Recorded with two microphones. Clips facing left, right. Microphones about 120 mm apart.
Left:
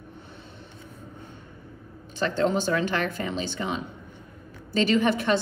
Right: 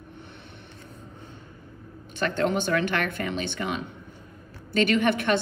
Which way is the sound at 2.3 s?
65° right (ahead or behind).